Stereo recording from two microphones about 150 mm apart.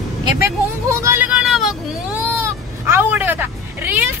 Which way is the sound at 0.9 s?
15° right (ahead or behind).